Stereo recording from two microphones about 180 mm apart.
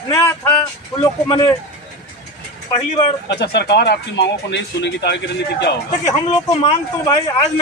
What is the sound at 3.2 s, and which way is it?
Speech, 70° left (ahead or behind).